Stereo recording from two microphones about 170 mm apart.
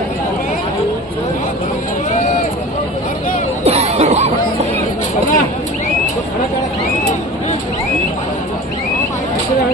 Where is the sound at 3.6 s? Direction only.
40° right (ahead or behind).